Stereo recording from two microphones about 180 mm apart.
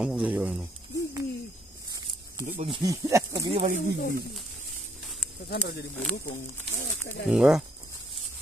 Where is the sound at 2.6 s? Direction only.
25° right (ahead or behind).